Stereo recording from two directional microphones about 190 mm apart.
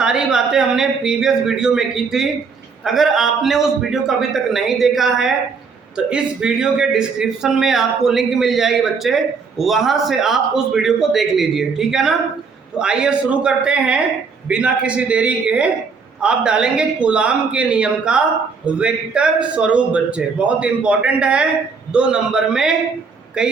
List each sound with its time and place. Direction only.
0.0 s a man's voice: 5° right (ahead or behind)